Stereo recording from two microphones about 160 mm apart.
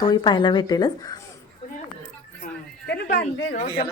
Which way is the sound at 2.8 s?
90° left.